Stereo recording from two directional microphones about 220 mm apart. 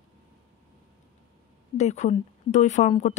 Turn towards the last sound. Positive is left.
turn(degrees=30)  # may be behind; listen again after turning